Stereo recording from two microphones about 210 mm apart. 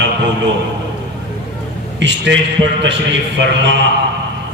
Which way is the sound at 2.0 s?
60° right (ahead or behind).